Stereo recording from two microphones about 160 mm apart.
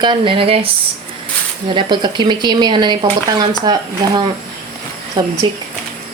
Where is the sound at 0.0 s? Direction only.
30° right (ahead or behind).